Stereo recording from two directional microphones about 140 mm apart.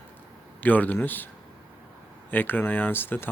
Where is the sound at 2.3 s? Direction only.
15° left (ahead or behind).